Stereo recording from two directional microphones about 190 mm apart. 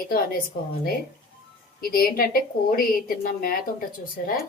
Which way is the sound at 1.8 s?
50° left (ahead or behind).